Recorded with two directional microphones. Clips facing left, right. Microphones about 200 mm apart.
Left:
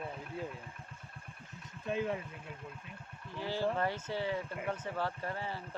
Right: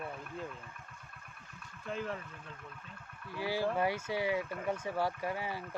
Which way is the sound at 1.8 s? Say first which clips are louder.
Left 4 dB; 15° left (ahead or behind).